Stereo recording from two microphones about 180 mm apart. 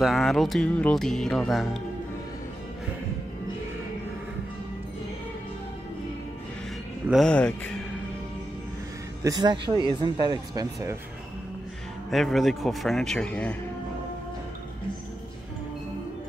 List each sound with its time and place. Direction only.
0.0 s music: centre (ahead or behind)
7.1 s music: 5° left (ahead or behind)
9.2 s speech: 20° right (ahead or behind)
12.1 s music: centre (ahead or behind)